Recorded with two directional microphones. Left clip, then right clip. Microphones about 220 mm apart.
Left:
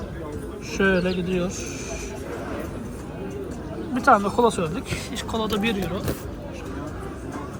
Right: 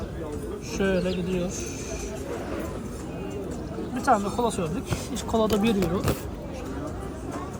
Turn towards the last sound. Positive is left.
turn(degrees=0)  # may be behind; listen again after turning